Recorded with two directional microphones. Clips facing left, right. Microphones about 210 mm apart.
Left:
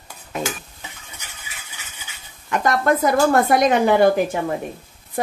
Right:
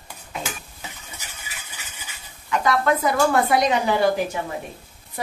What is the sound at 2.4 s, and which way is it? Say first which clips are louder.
Speech: left 2 dB; 45° left (ahead or behind).